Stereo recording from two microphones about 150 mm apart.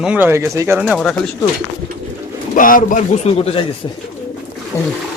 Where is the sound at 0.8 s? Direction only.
Centre (ahead or behind).